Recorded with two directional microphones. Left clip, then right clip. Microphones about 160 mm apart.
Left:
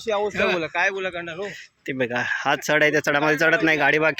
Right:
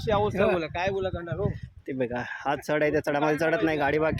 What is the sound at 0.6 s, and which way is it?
Speech, 40° left (ahead or behind).